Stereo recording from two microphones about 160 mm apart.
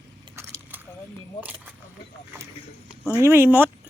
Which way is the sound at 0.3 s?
15° right (ahead or behind).